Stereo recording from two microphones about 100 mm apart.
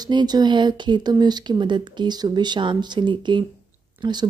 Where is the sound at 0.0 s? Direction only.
45° right (ahead or behind).